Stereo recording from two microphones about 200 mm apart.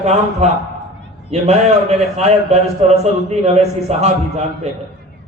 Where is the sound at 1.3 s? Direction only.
30° right (ahead or behind).